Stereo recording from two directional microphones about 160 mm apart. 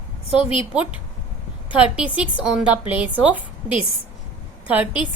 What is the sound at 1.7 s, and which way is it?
A woman's voice, 10° right (ahead or behind).